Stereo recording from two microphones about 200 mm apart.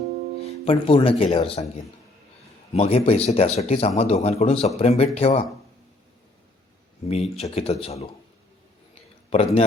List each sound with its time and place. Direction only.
0.4 s speech: 30° left (ahead or behind)
2.7 s speech: 30° left (ahead or behind)
7.1 s speech: 30° left (ahead or behind)
9.3 s speech: 30° left (ahead or behind)